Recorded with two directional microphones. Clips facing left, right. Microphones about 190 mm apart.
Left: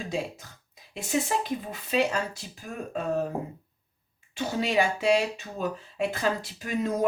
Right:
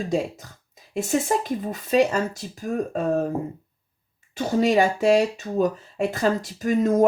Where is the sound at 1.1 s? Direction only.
45° right (ahead or behind).